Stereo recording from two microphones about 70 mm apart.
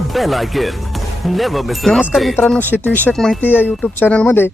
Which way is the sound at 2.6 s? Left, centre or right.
Left.